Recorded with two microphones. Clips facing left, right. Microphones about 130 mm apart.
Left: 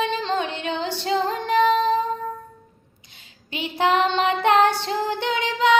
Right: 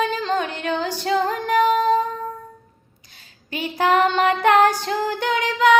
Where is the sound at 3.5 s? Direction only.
20° left (ahead or behind).